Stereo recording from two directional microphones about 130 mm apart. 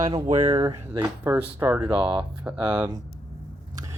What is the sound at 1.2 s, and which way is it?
Speech, 15° right (ahead or behind).